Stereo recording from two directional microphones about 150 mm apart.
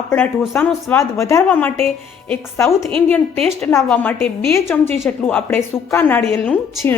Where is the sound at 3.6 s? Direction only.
15° left (ahead or behind).